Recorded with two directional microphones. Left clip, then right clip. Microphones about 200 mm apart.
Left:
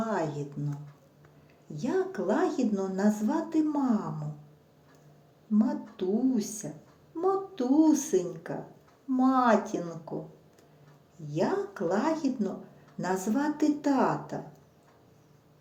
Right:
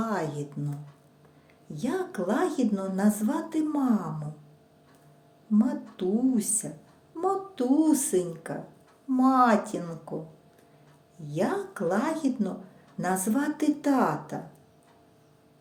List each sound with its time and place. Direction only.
0.0 s music: 20° right (ahead or behind)
1.7 s a woman's voice: 20° right (ahead or behind)
5.5 s a woman's voice: 20° right (ahead or behind)
11.3 s a woman's voice: 20° right (ahead or behind)